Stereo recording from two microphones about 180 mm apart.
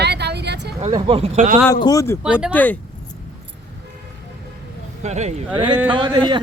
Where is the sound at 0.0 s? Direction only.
70° right (ahead or behind).